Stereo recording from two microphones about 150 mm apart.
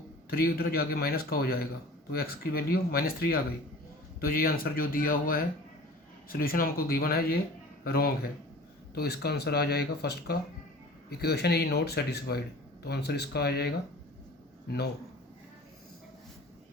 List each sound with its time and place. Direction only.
0.3 s speech: 90° left